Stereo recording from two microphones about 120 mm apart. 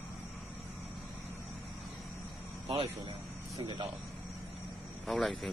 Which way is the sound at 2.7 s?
50° right (ahead or behind).